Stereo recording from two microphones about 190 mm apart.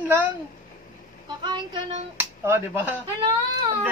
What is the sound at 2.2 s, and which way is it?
Speech, 10° right (ahead or behind).